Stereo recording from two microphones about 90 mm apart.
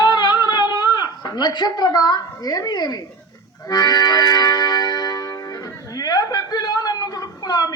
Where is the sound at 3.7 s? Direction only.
50° left (ahead or behind).